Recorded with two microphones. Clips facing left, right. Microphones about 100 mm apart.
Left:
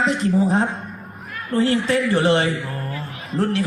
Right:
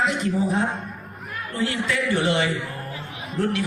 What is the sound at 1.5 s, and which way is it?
Speech, 35° left (ahead or behind).